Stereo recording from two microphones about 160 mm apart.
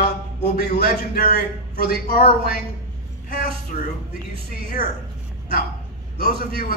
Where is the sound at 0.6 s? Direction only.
90° left.